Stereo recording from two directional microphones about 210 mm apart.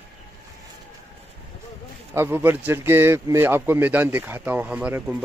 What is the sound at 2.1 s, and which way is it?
Speech, 10° right (ahead or behind).